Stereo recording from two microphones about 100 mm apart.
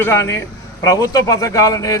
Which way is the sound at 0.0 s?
25° left (ahead or behind).